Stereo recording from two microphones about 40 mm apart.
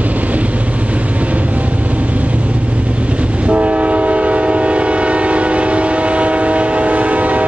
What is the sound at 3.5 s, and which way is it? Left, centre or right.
Train, right.